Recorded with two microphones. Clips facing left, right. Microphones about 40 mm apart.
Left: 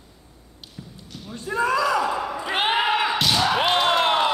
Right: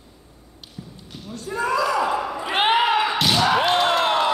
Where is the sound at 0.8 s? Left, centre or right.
Left.